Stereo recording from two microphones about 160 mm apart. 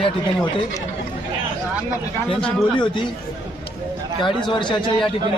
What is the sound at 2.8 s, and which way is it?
Speech, 30° left (ahead or behind).